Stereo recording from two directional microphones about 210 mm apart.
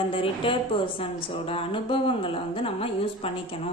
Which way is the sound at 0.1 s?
25° left (ahead or behind).